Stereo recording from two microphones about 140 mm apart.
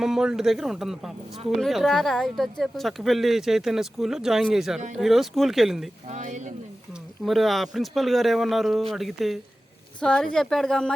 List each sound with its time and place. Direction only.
0.0 s a woman's voice: 5° right (ahead or behind)
6.1 s speech: 60° right (ahead or behind)
7.3 s a woman's voice: centre (ahead or behind)